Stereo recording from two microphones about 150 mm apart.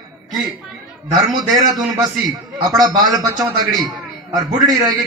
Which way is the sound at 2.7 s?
25° right (ahead or behind).